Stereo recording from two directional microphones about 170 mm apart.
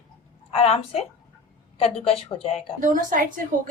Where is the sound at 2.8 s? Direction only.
50° right (ahead or behind).